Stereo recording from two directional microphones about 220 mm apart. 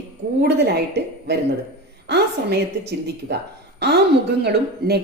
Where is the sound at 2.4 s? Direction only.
45° right (ahead or behind).